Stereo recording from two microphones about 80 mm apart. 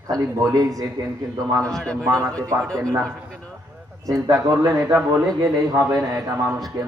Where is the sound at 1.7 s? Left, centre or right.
Centre.